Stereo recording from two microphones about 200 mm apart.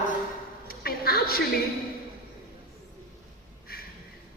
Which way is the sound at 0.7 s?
50° left (ahead or behind).